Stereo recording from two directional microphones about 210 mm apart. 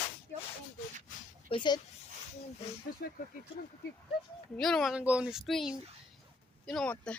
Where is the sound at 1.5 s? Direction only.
20° left (ahead or behind).